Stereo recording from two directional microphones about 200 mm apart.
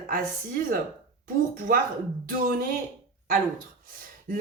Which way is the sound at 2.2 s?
45° right (ahead or behind).